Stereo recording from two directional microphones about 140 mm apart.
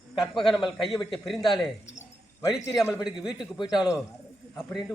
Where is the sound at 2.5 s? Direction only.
5° right (ahead or behind).